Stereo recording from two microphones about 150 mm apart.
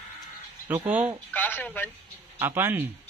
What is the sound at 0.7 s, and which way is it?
Speech, 10° right (ahead or behind).